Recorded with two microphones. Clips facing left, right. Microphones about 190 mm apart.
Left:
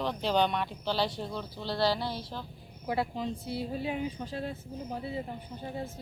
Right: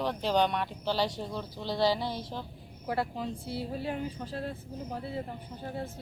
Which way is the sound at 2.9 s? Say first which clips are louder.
Left 1 dB; centre (ahead or behind).